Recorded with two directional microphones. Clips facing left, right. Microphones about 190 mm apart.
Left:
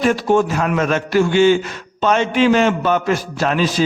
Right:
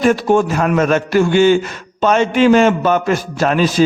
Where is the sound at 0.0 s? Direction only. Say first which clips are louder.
Right 2 dB; 50° right (ahead or behind).